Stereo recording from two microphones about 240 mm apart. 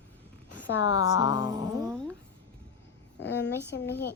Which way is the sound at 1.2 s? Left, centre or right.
Centre.